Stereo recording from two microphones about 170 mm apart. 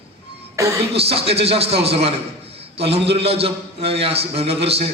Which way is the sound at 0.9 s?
35° right (ahead or behind).